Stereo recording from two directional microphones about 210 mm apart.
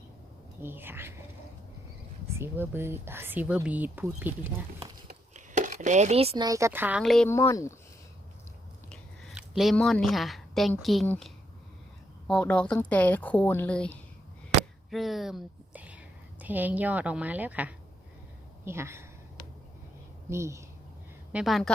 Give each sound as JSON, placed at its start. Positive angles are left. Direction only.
{"t": 0.6, "sound": "speech", "side_deg": -10}
{"t": 2.4, "sound": "speech", "side_deg": -10}
{"t": 4.8, "sound": "a sound", "side_deg": -25}
{"t": 5.5, "sound": "speech", "side_deg": -35}
{"t": 7.3, "sound": "speech", "side_deg": 15}
{"t": 8.9, "sound": "a sound", "side_deg": 0}
{"t": 10.8, "sound": "speech", "side_deg": 5}
{"t": 12.3, "sound": "speech", "side_deg": 5}
{"t": 20.3, "sound": "speech", "side_deg": -15}
{"t": 21.3, "sound": "speech", "side_deg": 0}